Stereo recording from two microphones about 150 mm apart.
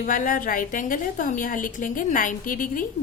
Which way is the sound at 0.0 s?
65° left (ahead or behind).